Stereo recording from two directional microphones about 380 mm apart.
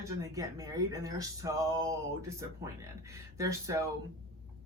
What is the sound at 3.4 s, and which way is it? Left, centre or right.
Speech, centre.